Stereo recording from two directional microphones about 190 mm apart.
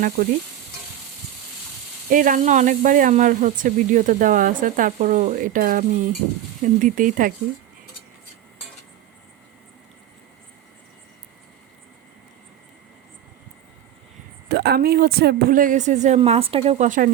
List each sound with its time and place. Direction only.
0.2 s a woman's voice: 50° right (ahead or behind)
2.0 s a woman's voice: 45° right (ahead or behind)
14.5 s a woman's voice: 55° right (ahead or behind); by 17.1 s 40° right (ahead or behind)